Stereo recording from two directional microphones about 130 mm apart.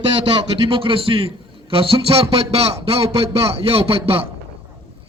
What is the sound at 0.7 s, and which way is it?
A man's voice, 45° right (ahead or behind).